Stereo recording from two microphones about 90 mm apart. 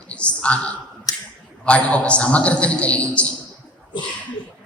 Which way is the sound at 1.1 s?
45° left (ahead or behind).